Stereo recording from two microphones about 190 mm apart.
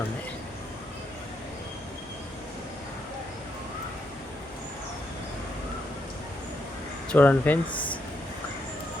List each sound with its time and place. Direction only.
7.1 s speech: 10° left (ahead or behind)
7.7 s air conditioning: 25° left (ahead or behind)